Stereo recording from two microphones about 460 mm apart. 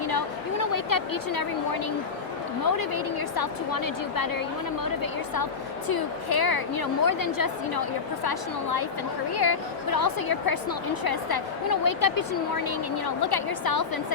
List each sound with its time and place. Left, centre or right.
0.0 s a sound: left
2.6 s a woman's voice: left
5.9 s a woman's voice: left
13.2 s a woman's voice: left